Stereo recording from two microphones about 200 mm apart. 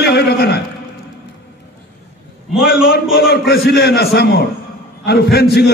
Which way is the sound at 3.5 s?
55° left (ahead or behind).